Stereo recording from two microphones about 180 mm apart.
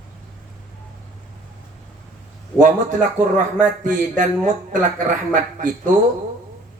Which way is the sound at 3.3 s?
45° right (ahead or behind).